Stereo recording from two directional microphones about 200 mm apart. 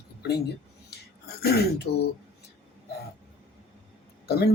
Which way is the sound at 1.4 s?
50° left (ahead or behind).